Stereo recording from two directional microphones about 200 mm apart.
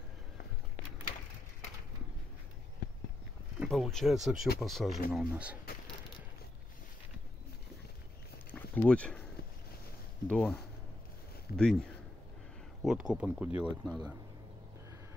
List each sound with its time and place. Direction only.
3.5 s speech: centre (ahead or behind)
8.5 s a sound: 10° left (ahead or behind)
10.2 s speech: 5° left (ahead or behind)
12.8 s speech: 5° right (ahead or behind)